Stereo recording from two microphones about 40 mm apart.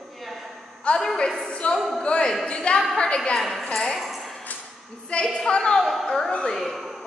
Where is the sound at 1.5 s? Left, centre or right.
Left.